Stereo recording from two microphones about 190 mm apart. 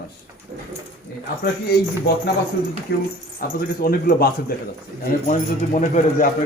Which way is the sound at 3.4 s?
50° left (ahead or behind).